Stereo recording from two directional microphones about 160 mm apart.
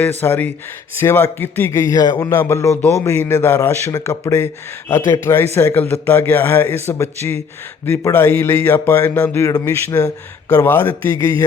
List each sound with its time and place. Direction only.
0.0 s a man's voice: 15° left (ahead or behind)